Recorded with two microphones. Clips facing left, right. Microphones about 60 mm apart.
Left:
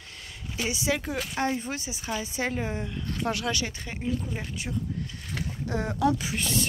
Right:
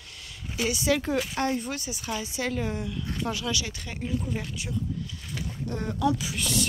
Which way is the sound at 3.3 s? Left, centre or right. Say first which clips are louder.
Left 3 dB; left.